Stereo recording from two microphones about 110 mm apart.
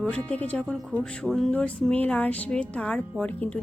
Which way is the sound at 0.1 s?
10° left (ahead or behind).